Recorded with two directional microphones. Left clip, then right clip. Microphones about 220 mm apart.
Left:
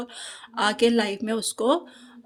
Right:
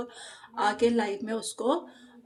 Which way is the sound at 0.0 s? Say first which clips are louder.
Left 3 dB; 40° left (ahead or behind).